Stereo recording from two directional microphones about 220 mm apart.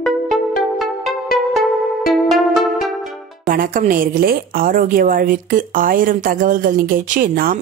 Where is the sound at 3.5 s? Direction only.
40° right (ahead or behind).